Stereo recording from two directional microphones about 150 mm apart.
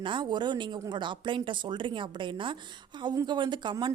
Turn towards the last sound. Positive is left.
turn(degrees=-30)  # may be behind; listen again after turning